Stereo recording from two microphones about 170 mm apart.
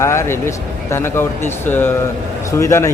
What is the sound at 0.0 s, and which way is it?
A man's voice, 15° left (ahead or behind).